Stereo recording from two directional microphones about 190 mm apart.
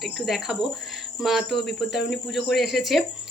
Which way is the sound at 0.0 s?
Centre (ahead or behind).